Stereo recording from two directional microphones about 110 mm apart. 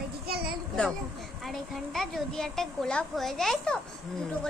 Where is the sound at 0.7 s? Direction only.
5° left (ahead or behind).